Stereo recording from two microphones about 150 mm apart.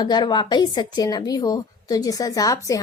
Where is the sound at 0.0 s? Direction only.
30° left (ahead or behind).